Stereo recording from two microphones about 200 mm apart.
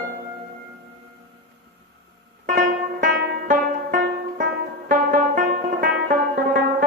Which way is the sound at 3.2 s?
45° right (ahead or behind).